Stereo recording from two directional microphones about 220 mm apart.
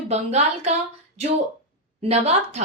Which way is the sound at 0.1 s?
30° right (ahead or behind).